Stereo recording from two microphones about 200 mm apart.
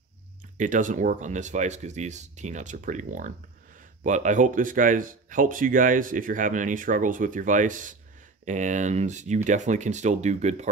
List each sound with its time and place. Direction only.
0.6 s speech: 40° right (ahead or behind)